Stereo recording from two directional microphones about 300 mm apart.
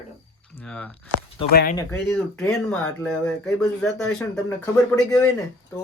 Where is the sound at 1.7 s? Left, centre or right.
Centre.